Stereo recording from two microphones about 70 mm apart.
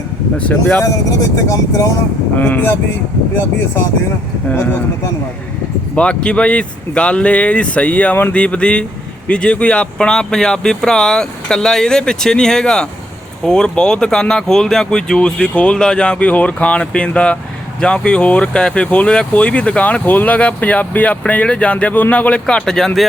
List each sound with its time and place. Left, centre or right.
0.3 s speech: centre
1.5 s speech: left
2.4 s speech: left
4.5 s speech: left
6.0 s speech: centre